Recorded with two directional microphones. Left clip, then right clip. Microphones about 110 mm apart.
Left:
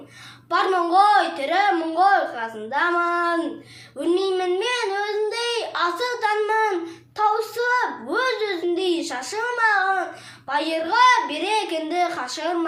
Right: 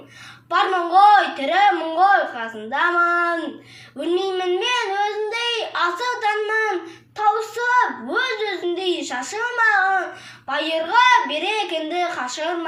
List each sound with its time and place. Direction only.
0.5 s a child's voice: 35° left (ahead or behind)